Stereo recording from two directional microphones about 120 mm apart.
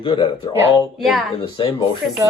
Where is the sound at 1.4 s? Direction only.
45° left (ahead or behind).